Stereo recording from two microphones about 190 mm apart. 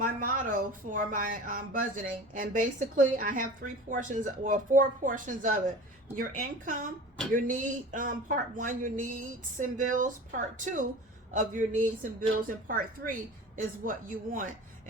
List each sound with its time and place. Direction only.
0.0 s speech: 45° right (ahead or behind)